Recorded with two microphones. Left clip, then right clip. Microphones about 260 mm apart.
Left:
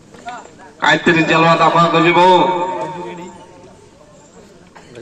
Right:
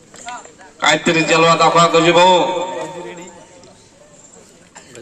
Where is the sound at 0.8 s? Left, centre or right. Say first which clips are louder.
Left 2 dB; right.